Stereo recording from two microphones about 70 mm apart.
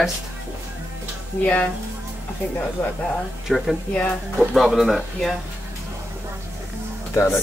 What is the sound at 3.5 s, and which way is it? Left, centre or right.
Speech, centre.